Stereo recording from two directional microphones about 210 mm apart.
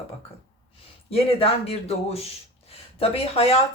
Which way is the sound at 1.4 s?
30° left (ahead or behind).